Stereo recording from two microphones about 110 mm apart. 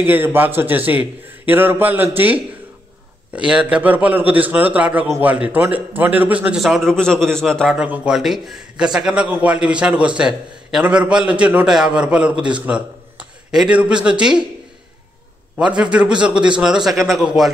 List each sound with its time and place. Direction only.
0.0 s a man's voice: 20° right (ahead or behind)
6.6 s a man's voice: centre (ahead or behind)
7.7 s a man's voice: 10° right (ahead or behind)
15.5 s a man's voice: 10° right (ahead or behind)